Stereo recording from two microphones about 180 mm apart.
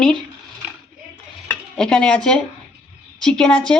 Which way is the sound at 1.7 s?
5° left (ahead or behind).